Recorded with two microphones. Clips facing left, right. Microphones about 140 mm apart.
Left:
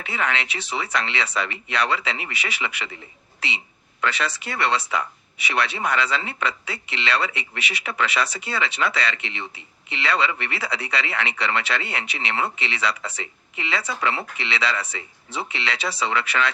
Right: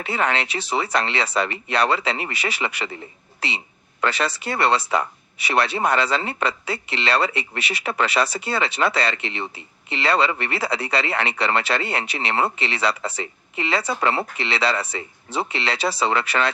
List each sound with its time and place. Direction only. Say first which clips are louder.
0.0 s speech: right 3 dB; 35° right (ahead or behind)